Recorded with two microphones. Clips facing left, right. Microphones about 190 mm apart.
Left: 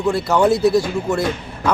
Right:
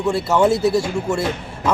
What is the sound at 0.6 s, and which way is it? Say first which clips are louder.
Speech: left 2 dB; 25° right (ahead or behind).